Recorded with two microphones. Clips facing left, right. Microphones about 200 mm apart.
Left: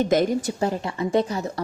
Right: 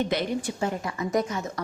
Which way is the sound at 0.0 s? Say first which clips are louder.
Left 6 dB; 45° left (ahead or behind).